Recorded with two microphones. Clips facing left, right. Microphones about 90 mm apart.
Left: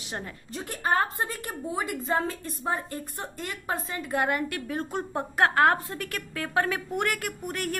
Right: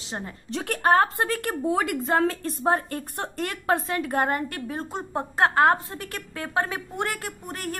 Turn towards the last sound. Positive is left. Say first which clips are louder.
# left 2 dB
turn(degrees=-30)  # may be behind; listen again after turning